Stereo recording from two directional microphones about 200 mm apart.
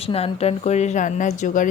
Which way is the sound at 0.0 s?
30° left (ahead or behind).